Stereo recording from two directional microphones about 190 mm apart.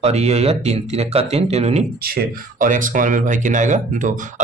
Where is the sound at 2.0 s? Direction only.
50° right (ahead or behind).